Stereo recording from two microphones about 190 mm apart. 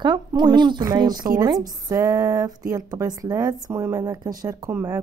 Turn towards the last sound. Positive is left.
turn(degrees=-15)  # may be behind; listen again after turning